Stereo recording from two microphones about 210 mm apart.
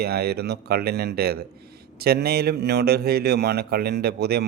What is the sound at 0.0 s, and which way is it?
A man's voice, 50° right (ahead or behind).